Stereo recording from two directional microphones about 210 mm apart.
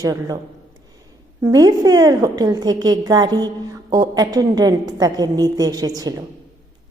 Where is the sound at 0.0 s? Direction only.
15° right (ahead or behind).